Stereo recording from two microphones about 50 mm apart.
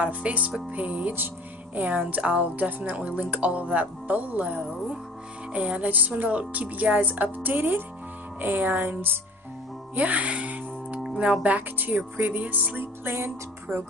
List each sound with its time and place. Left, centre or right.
0.0 s speech: right
2.0 s music: right
9.9 s music: right
11.0 s music: centre
11.4 s music: right
13.0 s speech: right